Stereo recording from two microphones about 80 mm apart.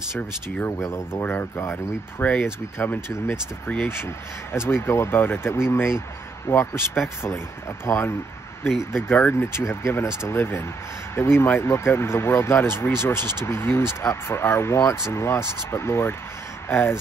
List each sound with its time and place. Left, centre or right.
0.7 s speech: left
1.2 s speech: left
8.6 s speech: centre
9.1 s speech: left